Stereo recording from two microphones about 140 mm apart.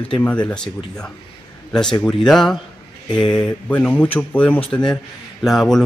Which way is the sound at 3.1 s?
30° left (ahead or behind).